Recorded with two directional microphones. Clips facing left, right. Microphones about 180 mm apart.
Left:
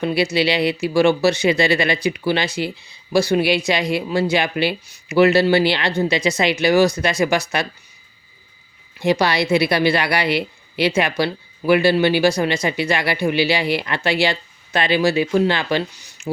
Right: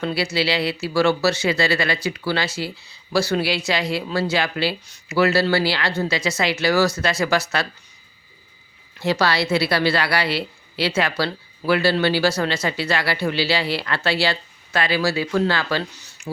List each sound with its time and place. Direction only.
0.0 s speech: 15° left (ahead or behind)
9.0 s speech: 15° left (ahead or behind)